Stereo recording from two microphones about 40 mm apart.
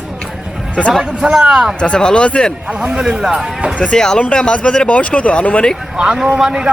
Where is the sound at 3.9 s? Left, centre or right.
Centre.